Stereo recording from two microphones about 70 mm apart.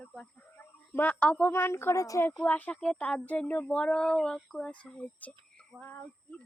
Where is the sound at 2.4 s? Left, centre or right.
Left.